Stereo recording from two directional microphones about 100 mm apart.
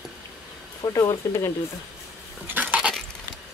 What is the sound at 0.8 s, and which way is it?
Speech, 40° left (ahead or behind).